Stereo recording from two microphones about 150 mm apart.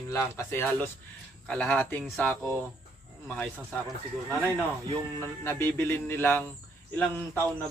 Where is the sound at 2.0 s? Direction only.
5° left (ahead or behind).